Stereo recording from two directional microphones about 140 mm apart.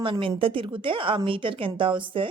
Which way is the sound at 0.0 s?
40° right (ahead or behind).